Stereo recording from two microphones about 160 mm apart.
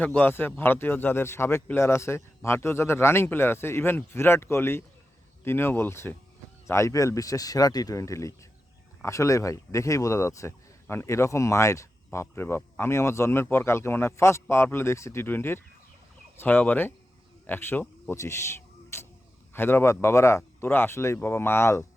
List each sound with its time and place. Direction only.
0.0 s speech: 10° left (ahead or behind)
17.4 s a sound: 15° left (ahead or behind)
19.5 s speech: 15° left (ahead or behind)